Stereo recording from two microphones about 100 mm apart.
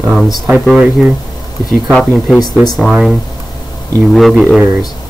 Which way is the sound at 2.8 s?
Centre (ahead or behind).